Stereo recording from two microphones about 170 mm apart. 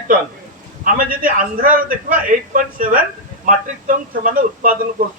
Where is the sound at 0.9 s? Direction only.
55° right (ahead or behind).